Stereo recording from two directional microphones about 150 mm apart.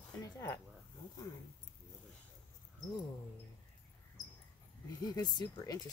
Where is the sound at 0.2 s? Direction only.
25° left (ahead or behind).